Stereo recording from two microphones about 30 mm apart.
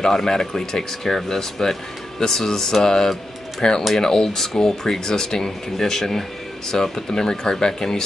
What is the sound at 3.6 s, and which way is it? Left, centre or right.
Speech, left.